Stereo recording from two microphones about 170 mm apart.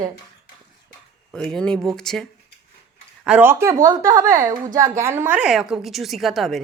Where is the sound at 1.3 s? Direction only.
5° left (ahead or behind).